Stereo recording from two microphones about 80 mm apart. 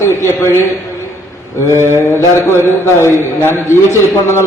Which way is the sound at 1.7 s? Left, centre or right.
Right.